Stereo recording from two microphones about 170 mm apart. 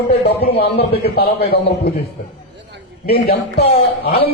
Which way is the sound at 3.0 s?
65° left (ahead or behind).